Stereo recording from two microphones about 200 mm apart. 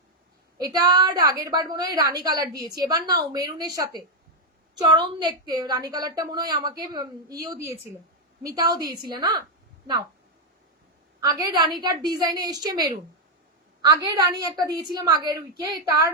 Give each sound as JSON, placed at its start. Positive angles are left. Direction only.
{"t": 0.6, "sound": "a woman's voice", "side_deg": -20}
{"t": 11.2, "sound": "a woman's voice", "side_deg": -20}